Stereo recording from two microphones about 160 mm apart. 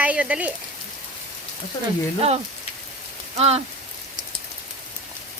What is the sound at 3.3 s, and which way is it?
Speech, 40° right (ahead or behind).